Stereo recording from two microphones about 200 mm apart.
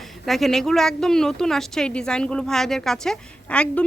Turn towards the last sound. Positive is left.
turn(degrees=5)  # may be behind; listen again after turning